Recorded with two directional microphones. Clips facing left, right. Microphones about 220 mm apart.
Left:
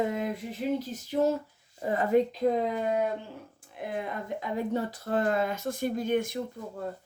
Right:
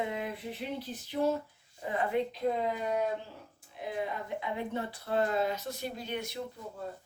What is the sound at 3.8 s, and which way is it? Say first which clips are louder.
Speech: left 2 dB; 55° left (ahead or behind).